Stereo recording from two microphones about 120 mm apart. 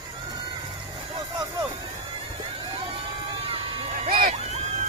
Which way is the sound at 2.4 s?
50° right (ahead or behind).